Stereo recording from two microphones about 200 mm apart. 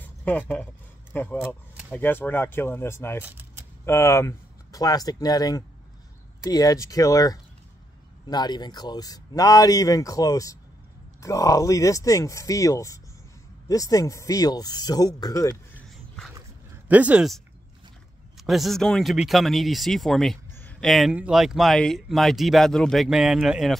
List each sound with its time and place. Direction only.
0.0 s speech: 10° left (ahead or behind)
3.3 s keys jangling: 10° right (ahead or behind)
3.8 s speech: 15° left (ahead or behind)
16.3 s a sound: 5° right (ahead or behind)
18.4 s speech: centre (ahead or behind)